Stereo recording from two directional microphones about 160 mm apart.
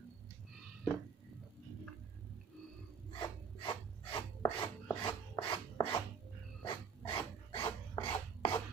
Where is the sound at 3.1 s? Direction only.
30° left (ahead or behind).